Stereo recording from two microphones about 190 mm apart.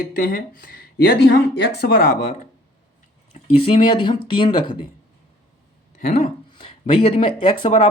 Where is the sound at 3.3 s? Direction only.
30° left (ahead or behind).